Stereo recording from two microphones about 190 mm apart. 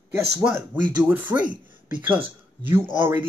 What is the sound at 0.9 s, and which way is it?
Speech, 10° right (ahead or behind).